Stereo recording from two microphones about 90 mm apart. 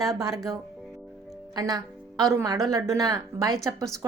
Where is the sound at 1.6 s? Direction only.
45° right (ahead or behind).